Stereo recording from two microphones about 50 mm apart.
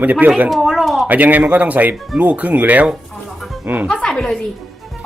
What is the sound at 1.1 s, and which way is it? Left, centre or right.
A man's voice, right.